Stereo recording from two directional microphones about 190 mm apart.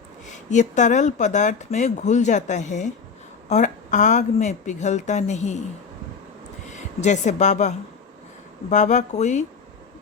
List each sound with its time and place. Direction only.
0.5 s speech: 40° left (ahead or behind)
6.7 s a woman's voice: 40° left (ahead or behind)
8.7 s speech: 40° left (ahead or behind)